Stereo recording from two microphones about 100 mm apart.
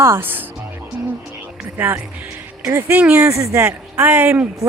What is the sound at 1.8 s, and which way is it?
Speech, 20° right (ahead or behind).